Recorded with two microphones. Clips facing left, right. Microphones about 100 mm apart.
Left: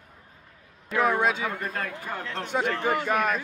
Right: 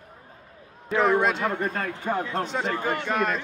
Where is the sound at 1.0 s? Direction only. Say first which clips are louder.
Right 2 dB; 5° left (ahead or behind).